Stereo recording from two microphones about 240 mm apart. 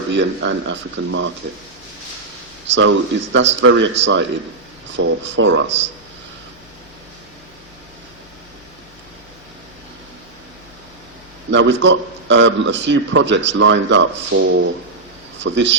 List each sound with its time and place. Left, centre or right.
0.1 s a man's voice: right
2.6 s a man's voice: right
11.5 s a man's voice: right
15.4 s a man's voice: right